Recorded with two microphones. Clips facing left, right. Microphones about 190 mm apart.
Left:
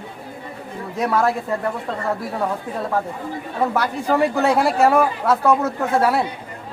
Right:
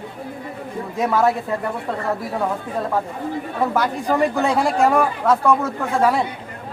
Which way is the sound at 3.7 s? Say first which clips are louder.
Even; centre (ahead or behind).